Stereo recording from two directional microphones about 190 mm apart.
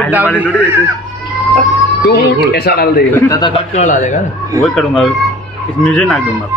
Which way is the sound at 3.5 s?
35° left (ahead or behind).